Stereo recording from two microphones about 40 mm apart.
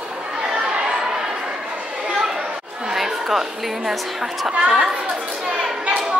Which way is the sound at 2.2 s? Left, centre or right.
Centre.